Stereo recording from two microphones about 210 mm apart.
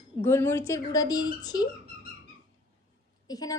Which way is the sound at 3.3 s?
15° left (ahead or behind).